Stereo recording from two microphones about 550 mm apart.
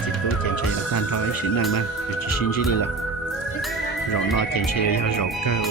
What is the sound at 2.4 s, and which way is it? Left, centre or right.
Speech, left.